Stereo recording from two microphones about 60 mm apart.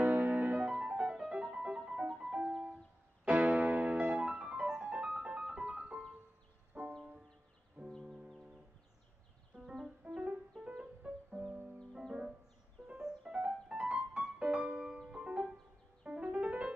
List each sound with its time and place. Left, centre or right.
0.0 s music: right
0.7 s music: centre
3.3 s piano: right
5.2 s keyboard: centre
6.7 s music: centre
8.0 s music: centre
10.0 s music: right
11.3 s music: right
13.0 s music: centre